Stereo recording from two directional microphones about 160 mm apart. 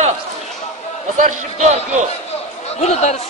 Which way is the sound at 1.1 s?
50° right (ahead or behind).